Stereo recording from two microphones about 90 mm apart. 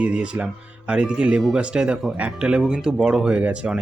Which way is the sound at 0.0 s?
10° right (ahead or behind).